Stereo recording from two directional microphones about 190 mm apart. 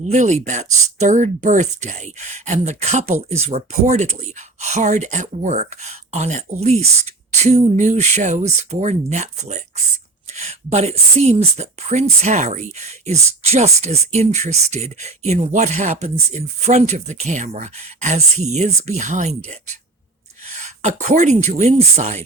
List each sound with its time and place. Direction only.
0.0 s speech: 40° right (ahead or behind)
20.6 s speech: 35° right (ahead or behind)